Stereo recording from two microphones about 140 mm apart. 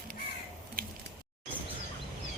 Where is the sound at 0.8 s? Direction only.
90° right.